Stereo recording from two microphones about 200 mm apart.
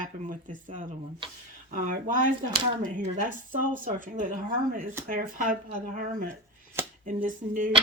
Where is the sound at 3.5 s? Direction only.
45° right (ahead or behind).